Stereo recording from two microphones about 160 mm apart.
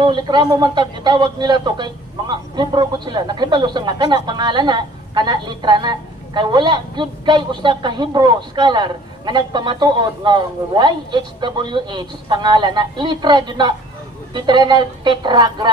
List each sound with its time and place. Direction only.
0.0 s a man's voice: 30° right (ahead or behind)